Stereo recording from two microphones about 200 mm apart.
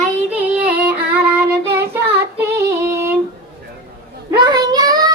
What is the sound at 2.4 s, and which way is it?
Female singing, 15° right (ahead or behind).